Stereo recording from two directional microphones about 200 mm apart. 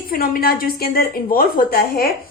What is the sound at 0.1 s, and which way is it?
A woman's voice, 45° left (ahead or behind).